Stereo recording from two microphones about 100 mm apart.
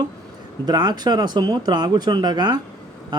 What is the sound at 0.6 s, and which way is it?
Speech, 45° right (ahead or behind).